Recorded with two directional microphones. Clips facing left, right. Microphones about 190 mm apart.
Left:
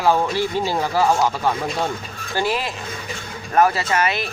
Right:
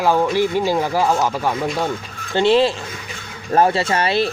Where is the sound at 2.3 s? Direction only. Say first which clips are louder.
Right 8 dB; 25° right (ahead or behind).